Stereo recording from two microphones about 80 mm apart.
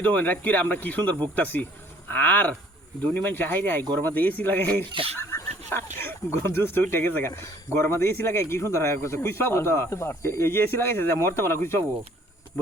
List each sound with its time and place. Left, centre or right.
0.0 s speech: centre